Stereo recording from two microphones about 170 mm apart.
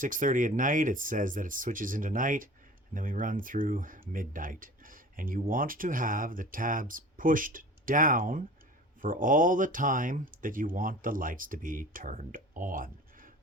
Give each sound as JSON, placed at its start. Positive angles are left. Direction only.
{"t": 0.0, "sound": "speech", "side_deg": -50}